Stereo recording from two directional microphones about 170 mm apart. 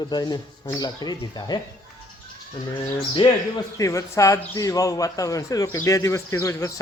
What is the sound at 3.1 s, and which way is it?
A man's voice, 25° left (ahead or behind).